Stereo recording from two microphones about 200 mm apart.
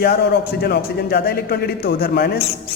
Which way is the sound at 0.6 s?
55° left (ahead or behind).